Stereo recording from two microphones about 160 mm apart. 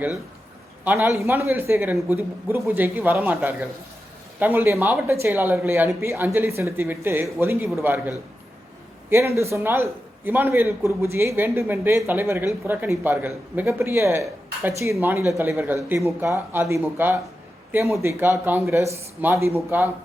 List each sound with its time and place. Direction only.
0.9 s speech: 15° right (ahead or behind)